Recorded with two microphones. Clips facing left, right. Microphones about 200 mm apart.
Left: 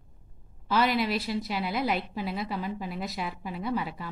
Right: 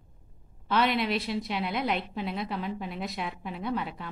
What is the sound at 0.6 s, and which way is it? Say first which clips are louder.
Speech: left 1 dB; centre (ahead or behind).